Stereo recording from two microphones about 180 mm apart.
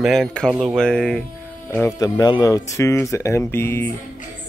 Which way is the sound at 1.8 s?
20° left (ahead or behind).